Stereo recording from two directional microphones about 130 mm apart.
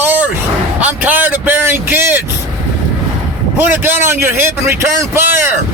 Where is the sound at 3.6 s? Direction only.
15° right (ahead or behind).